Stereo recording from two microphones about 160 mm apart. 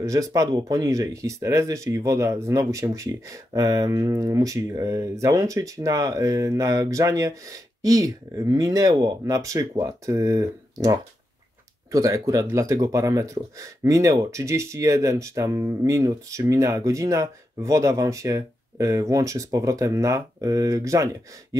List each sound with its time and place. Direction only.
0.0 s speech: 20° right (ahead or behind)